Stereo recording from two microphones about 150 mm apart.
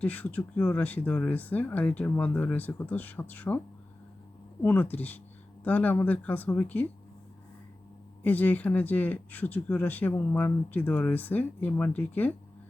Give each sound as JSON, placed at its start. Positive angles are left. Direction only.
{"t": 0.0, "sound": "speech", "side_deg": 10}
{"t": 4.6, "sound": "speech", "side_deg": 10}
{"t": 8.2, "sound": "speech", "side_deg": 10}